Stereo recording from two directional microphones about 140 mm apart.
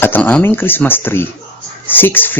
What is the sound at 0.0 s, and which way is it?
Speech, 15° left (ahead or behind).